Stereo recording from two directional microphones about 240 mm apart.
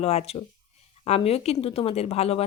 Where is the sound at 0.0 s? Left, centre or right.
Left.